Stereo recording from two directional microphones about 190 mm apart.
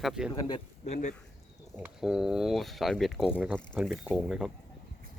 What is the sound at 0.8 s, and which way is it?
Speech, 35° left (ahead or behind).